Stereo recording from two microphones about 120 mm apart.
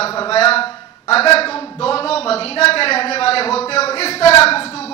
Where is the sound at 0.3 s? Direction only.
55° left (ahead or behind).